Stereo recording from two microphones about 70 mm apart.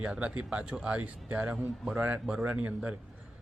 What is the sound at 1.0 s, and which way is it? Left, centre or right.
Speech, right.